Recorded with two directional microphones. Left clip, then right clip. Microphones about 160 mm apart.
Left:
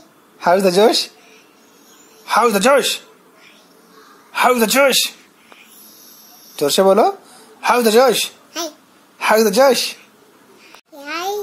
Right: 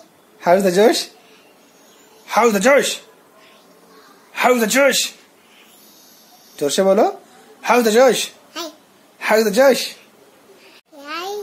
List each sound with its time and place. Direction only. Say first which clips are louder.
0.4 s a woman's voice: left 1 dB; 10° left (ahead or behind)
2.2 s a man's voice: left 1 dB; 15° left (ahead or behind)
4.3 s a woman's voice: left 1 dB; 15° left (ahead or behind)
6.5 s a woman's voice: left 3 dB; 15° left (ahead or behind)
8.5 s babbling: left 4 dB; centre (ahead or behind)
9.2 s a woman's voice: left 1 dB; 15° left (ahead or behind)
10.7 s a sound: left 3 dB; centre (ahead or behind)